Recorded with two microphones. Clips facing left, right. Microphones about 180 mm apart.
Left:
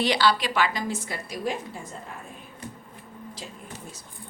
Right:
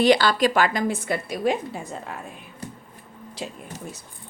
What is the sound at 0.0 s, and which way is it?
A woman's voice, 50° right (ahead or behind).